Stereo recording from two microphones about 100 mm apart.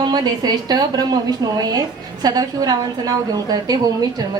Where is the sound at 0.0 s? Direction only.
45° right (ahead or behind).